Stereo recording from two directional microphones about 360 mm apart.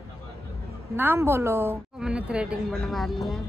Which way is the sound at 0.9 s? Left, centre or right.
Centre.